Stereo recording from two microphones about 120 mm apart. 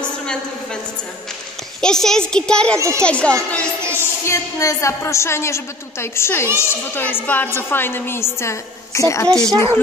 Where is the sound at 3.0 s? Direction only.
10° left (ahead or behind).